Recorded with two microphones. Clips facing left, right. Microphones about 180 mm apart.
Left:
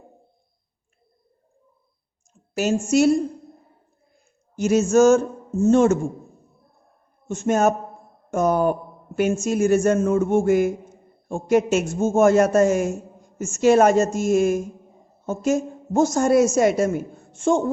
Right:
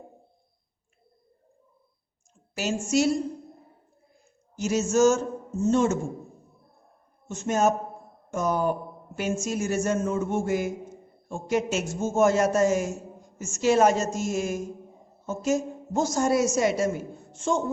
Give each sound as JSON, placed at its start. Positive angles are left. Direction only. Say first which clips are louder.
{"t": 2.6, "sound": "a man's voice", "louder": "left 6 dB", "side_deg": 45}
{"t": 4.5, "sound": "a man's voice", "louder": "left 7 dB", "side_deg": 55}
{"t": 7.3, "sound": "a man's voice", "louder": "left 4 dB", "side_deg": 55}